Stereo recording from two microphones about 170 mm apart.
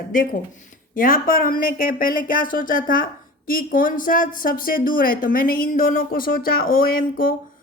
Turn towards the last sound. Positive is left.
turn(degrees=55)  # may be behind; listen again after turning